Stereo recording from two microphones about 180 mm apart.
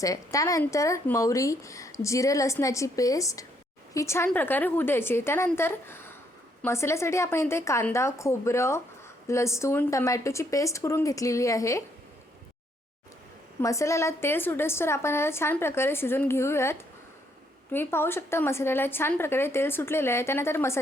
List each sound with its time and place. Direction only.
0.0 s a woman's voice: 20° left (ahead or behind)
13.6 s a woman's voice: 15° left (ahead or behind)